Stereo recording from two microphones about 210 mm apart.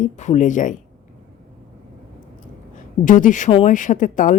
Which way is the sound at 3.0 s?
35° left (ahead or behind).